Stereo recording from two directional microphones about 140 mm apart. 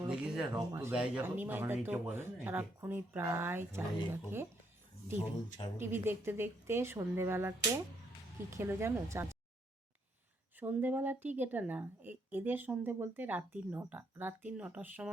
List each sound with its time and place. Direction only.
0.0 s a sound: 5° right (ahead or behind)
0.5 s a woman's voice: 20° right (ahead or behind)
5.2 s speech: 40° left (ahead or behind)
5.8 s a woman's voice: 15° right (ahead or behind)
8.5 s speech: 20° right (ahead or behind)
10.6 s a woman's voice: 15° right (ahead or behind)